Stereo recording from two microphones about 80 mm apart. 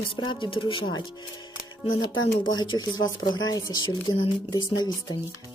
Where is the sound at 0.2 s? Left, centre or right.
Left.